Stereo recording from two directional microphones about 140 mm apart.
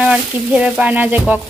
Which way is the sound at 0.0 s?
5° right (ahead or behind).